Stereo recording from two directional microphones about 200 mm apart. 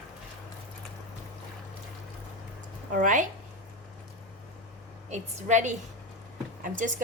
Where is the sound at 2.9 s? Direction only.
40° right (ahead or behind).